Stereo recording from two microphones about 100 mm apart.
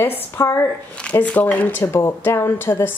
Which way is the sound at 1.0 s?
10° left (ahead or behind).